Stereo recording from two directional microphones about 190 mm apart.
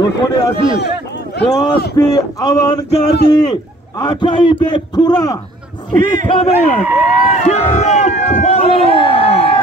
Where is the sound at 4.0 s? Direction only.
20° left (ahead or behind).